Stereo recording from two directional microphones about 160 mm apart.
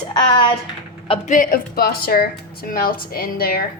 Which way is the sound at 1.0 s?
35° left (ahead or behind).